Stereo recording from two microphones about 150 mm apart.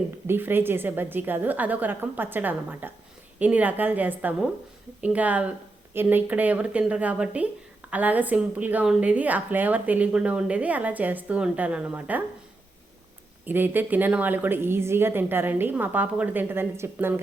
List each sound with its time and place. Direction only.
0.3 s a woman's voice: 15° right (ahead or behind)
13.4 s a woman's voice: 15° right (ahead or behind)